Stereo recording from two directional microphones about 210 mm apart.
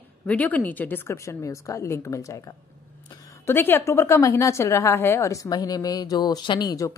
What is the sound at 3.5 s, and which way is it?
A woman's voice, 10° left (ahead or behind).